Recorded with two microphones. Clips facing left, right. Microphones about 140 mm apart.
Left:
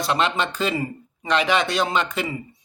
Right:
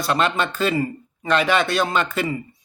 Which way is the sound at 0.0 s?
20° left (ahead or behind).